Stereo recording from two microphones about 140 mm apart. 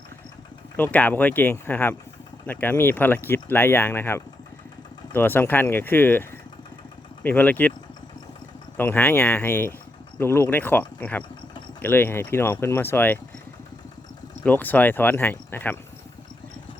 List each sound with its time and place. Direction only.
0.8 s speech: 10° left (ahead or behind)
8.8 s speech: 15° left (ahead or behind)
14.4 s speech: 15° left (ahead or behind)